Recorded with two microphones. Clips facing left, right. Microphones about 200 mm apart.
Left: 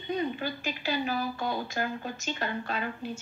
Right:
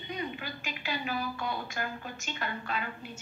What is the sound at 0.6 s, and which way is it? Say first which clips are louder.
A woman's voice: left 4 dB; 35° left (ahead or behind).